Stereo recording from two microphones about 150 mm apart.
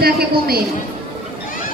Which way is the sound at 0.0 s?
90° right.